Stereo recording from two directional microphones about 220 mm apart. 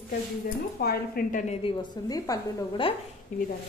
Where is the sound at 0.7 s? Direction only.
45° left (ahead or behind).